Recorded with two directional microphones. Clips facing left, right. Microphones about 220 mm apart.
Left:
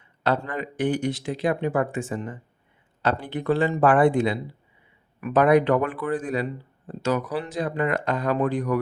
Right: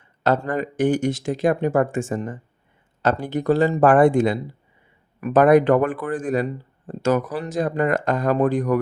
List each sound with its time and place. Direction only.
0.2 s speech: 45° right (ahead or behind)